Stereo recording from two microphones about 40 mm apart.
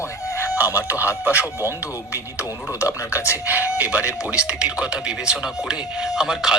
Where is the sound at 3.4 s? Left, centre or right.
Right.